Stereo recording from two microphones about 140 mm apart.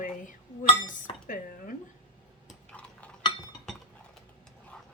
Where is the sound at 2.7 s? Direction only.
10° left (ahead or behind).